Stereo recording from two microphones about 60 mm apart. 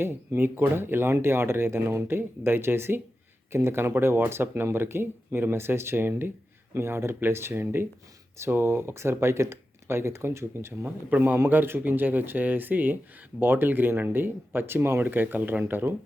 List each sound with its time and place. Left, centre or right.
0.0 s speech: right